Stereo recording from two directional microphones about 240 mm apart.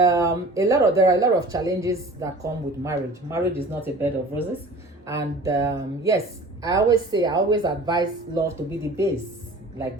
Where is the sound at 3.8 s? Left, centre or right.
Centre.